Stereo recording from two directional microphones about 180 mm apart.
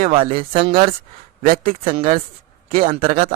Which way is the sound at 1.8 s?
30° right (ahead or behind).